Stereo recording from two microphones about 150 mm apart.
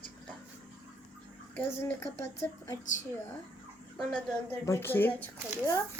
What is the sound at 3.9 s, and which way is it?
Speech, 5° left (ahead or behind).